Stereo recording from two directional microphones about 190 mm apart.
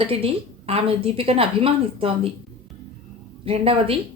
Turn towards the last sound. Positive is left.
turn(degrees=-30)  # may be behind; listen again after turning